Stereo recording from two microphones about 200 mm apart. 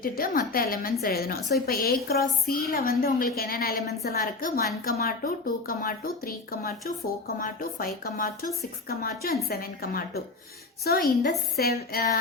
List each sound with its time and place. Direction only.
0.0 s a woman's voice: 45° left (ahead or behind)